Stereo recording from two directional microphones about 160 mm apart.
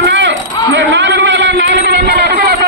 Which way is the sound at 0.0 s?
90° right.